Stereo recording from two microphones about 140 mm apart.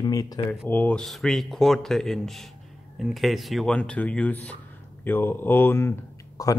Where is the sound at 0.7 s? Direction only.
10° left (ahead or behind).